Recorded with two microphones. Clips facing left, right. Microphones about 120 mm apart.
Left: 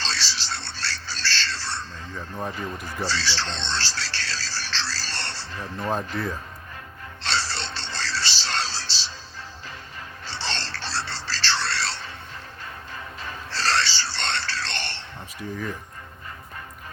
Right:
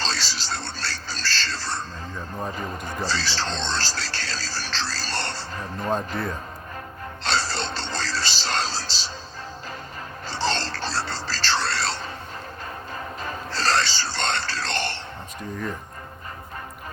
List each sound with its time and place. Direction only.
0.0 s music: 45° right (ahead or behind)
7.3 s music: 45° right (ahead or behind)
10.2 s a sound: 45° right (ahead or behind)
12.9 s music: 45° right (ahead or behind)
15.4 s speech: 5° left (ahead or behind)